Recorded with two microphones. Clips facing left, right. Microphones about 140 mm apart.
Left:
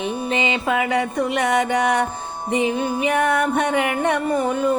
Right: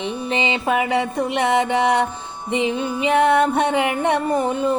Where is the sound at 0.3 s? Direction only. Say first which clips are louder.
Right 2 dB; 25° right (ahead or behind).